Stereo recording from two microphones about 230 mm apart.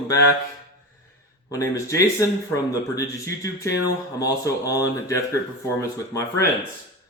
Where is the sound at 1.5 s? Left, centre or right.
Centre.